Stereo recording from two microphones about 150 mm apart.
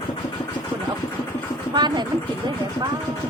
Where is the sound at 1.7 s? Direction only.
30° right (ahead or behind).